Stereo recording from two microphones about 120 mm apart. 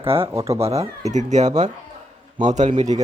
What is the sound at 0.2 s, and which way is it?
Speech, 25° right (ahead or behind).